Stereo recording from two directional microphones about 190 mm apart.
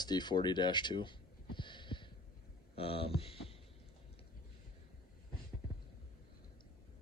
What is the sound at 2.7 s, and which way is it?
Speech, 30° left (ahead or behind).